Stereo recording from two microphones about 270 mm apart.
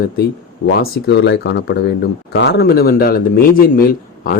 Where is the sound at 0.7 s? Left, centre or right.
Left.